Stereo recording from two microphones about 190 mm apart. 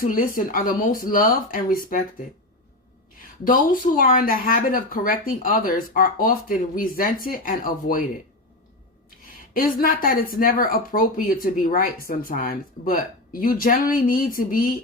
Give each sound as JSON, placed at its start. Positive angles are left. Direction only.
{"t": 0.0, "sound": "speech", "side_deg": 50}
{"t": 3.2, "sound": "speech", "side_deg": 45}
{"t": 9.5, "sound": "speech", "side_deg": 50}